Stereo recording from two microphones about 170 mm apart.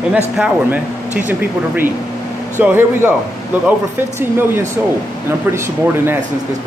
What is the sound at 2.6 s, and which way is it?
Speech, 10° right (ahead or behind).